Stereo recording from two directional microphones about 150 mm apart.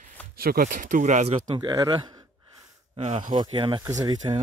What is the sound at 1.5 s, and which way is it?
Speech, 30° right (ahead or behind).